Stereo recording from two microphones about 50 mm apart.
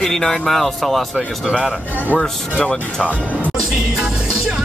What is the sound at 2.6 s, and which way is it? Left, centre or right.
Speech, left.